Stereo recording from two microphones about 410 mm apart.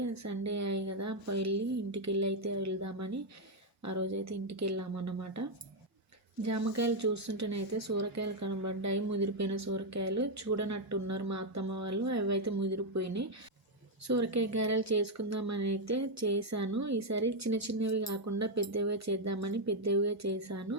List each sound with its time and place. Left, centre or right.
0.0 s speech: right